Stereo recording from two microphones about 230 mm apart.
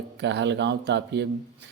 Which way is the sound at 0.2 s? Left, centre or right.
Right.